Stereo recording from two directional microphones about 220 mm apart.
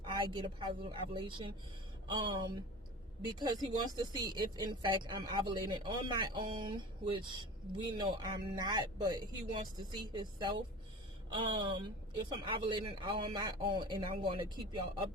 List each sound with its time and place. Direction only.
0.0 s speech: 20° right (ahead or behind)